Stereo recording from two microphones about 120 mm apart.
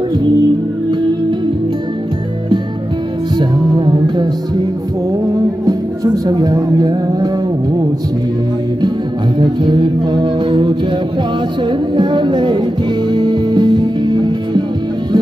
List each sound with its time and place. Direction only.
3.3 s music: 40° right (ahead or behind)
5.3 s music: 30° right (ahead or behind)
9.4 s music: 40° right (ahead or behind)